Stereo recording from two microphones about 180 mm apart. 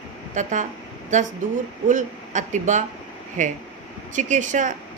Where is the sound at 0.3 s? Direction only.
45° right (ahead or behind).